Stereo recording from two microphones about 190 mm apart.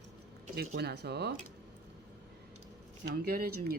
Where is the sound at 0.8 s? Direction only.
60° right (ahead or behind).